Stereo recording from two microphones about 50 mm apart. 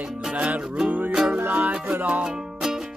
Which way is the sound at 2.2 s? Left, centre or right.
Centre.